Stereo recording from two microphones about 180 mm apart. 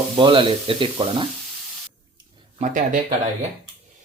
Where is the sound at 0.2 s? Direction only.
30° right (ahead or behind).